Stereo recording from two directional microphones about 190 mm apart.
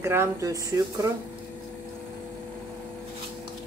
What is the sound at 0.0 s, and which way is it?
Speech, 15° right (ahead or behind).